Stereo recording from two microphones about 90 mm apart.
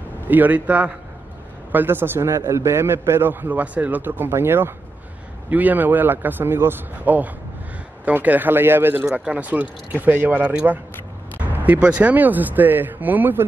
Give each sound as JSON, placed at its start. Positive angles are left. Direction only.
{"t": 0.3, "sound": "a man's voice", "side_deg": -20}